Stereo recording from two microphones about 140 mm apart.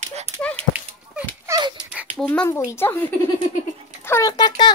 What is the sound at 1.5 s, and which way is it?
Dog, 20° right (ahead or behind).